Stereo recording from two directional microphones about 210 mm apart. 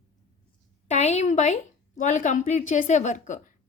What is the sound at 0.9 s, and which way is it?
A woman's voice, 30° left (ahead or behind).